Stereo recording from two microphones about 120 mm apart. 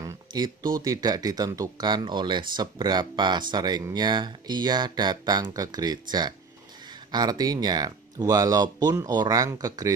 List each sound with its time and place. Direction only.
0.0 s speech: 30° right (ahead or behind)